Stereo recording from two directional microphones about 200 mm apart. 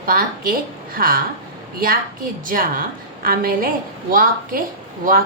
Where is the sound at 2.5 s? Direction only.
45° right (ahead or behind).